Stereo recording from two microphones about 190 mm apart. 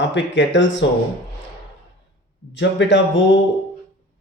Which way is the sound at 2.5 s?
70° left (ahead or behind).